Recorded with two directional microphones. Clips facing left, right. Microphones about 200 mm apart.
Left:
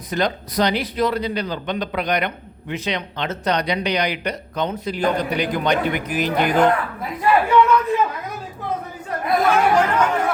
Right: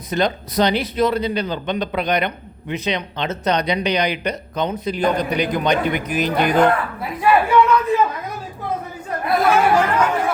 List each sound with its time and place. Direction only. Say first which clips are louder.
0.1 s a man's voice: right 2 dB; 25° right (ahead or behind)
9.2 s speech: right 1 dB; 5° right (ahead or behind)